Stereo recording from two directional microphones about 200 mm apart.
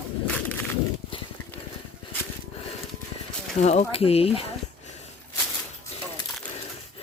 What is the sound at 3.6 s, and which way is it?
Speech, 35° left (ahead or behind).